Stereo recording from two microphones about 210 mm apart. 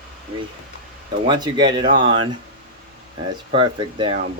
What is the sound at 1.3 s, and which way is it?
Speech, 20° right (ahead or behind).